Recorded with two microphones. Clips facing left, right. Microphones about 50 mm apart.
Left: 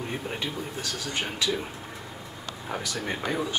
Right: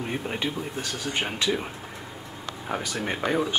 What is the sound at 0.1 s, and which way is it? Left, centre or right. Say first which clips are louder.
Speech: right 3 dB; centre.